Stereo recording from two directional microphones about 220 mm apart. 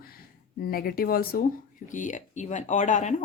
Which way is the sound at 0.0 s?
45° left (ahead or behind).